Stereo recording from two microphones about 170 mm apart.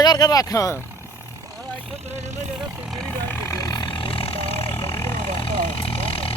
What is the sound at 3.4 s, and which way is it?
Vehicle, 20° left (ahead or behind).